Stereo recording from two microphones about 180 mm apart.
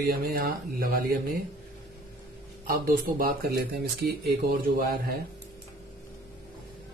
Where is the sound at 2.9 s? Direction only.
55° right (ahead or behind).